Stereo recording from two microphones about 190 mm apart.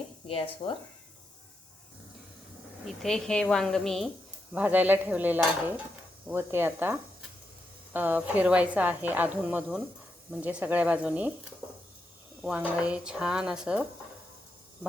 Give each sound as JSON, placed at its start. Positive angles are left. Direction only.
{"t": 0.3, "sound": "speech", "side_deg": 30}
{"t": 2.8, "sound": "a woman's voice", "side_deg": 0}
{"t": 12.4, "sound": "speech", "side_deg": -5}